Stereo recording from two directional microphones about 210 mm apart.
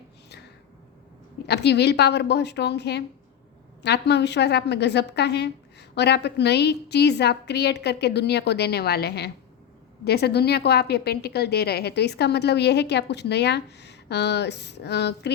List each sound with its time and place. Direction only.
1.5 s a woman's voice: 55° left (ahead or behind)